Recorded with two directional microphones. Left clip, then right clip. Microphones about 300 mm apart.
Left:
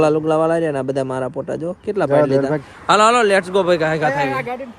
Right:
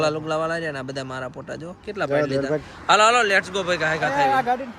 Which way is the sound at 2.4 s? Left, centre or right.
Left.